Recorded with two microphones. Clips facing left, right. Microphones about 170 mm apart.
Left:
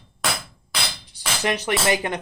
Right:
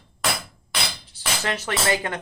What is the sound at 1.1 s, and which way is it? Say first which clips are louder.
Speech: left 4 dB; 15° left (ahead or behind).